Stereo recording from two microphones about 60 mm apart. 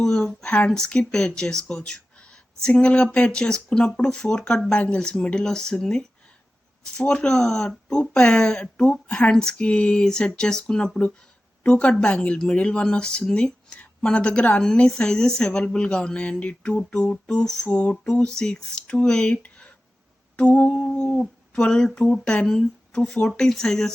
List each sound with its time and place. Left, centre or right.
0.0 s a woman's voice: centre
17.7 s humming: left
18.0 s speech: centre
20.3 s humming: left
21.2 s speech: centre